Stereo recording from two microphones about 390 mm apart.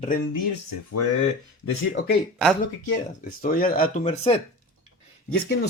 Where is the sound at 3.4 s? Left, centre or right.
Left.